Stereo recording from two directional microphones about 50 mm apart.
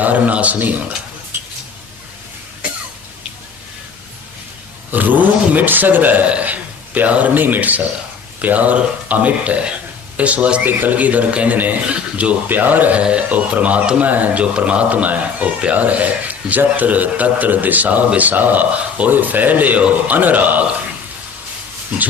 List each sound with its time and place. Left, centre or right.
0.0 s speech: right
1.3 s a sound: right
4.9 s speech: right
10.7 s speech: right
12.5 s speech: right